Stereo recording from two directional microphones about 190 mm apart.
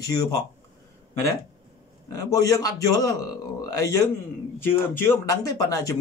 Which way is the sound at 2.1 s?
20° left (ahead or behind).